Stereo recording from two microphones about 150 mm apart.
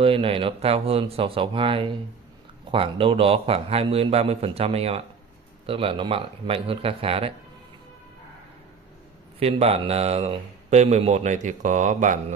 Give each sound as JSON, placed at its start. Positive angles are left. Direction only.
{"t": 0.0, "sound": "a man's voice", "side_deg": -35}
{"t": 9.4, "sound": "speech", "side_deg": -40}